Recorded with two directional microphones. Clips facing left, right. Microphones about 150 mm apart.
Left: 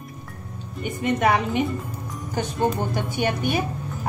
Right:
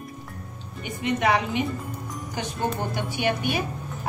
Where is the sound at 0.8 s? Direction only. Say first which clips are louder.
Left 2 dB; 45° left (ahead or behind).